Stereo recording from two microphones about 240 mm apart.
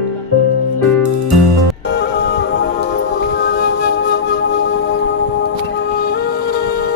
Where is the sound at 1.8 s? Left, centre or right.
Left.